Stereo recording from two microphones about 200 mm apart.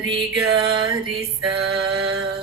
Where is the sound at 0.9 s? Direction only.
Centre (ahead or behind).